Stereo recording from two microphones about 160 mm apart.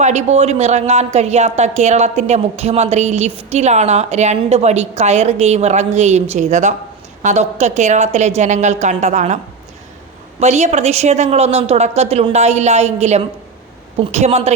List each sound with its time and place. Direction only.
0.0 s a woman's voice: 45° right (ahead or behind)
10.4 s a woman's voice: 45° right (ahead or behind)